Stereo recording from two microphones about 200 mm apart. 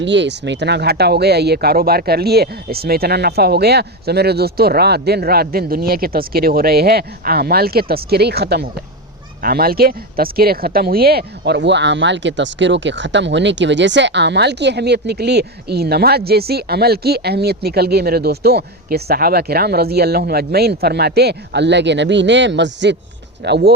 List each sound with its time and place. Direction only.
0.0 s speech: 65° right (ahead or behind)